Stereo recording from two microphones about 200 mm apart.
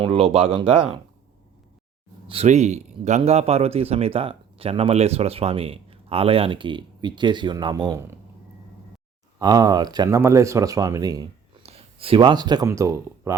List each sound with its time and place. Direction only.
0.0 s speech: 30° right (ahead or behind)
0.7 s speech: 5° right (ahead or behind)
2.2 s speech: 30° right (ahead or behind)
9.4 s speech: 20° right (ahead or behind)
11.6 s speech: 30° right (ahead or behind)